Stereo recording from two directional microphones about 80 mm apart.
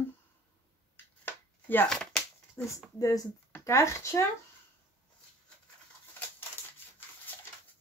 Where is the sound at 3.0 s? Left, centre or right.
Left.